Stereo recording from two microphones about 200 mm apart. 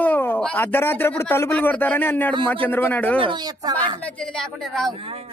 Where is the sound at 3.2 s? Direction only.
20° right (ahead or behind).